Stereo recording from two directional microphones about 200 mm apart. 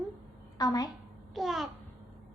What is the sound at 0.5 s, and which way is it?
Speech, 20° left (ahead or behind).